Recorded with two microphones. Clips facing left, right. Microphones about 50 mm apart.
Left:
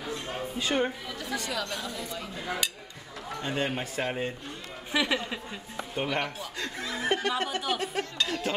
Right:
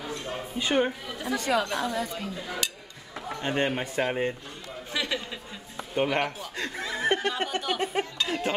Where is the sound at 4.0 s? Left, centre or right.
Centre.